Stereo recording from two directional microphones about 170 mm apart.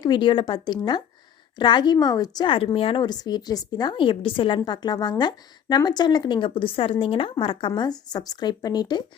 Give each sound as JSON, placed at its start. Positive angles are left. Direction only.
{"t": 0.0, "sound": "a woman's voice", "side_deg": 30}